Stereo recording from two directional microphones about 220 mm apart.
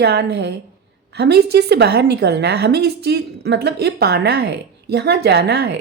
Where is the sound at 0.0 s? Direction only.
50° right (ahead or behind).